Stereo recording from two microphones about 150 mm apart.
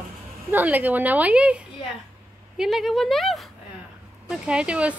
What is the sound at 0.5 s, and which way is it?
A woman's voice, 10° right (ahead or behind).